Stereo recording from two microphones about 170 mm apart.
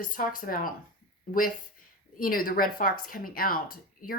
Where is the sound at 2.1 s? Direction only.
55° left (ahead or behind).